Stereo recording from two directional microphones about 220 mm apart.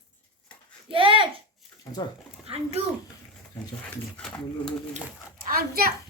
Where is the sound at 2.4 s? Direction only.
30° right (ahead or behind).